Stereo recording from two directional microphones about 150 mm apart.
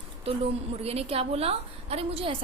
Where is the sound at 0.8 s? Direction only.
40° right (ahead or behind).